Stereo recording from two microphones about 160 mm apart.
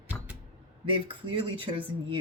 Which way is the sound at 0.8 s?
35° right (ahead or behind).